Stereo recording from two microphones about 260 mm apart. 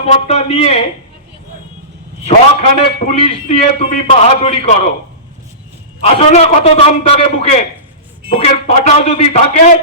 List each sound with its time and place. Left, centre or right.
0.0 s a man's voice: left
2.2 s a man's voice: left
6.0 s a man's voice: left